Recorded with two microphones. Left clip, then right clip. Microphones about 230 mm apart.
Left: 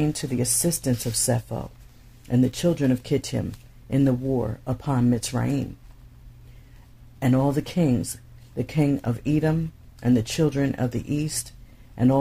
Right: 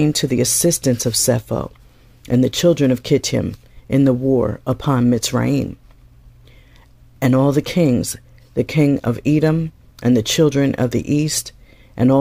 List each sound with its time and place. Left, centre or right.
0.0 s speech: right
7.2 s speech: right